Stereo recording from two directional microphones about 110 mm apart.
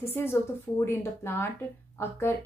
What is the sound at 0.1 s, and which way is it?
Speech, 20° left (ahead or behind).